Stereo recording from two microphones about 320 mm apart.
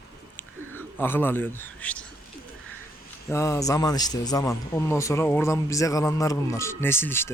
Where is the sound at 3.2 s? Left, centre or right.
Centre.